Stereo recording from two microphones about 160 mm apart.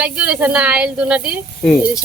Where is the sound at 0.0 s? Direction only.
10° right (ahead or behind).